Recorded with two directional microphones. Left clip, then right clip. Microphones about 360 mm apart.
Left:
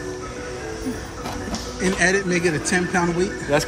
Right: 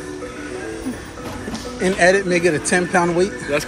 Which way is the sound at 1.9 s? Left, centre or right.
Centre.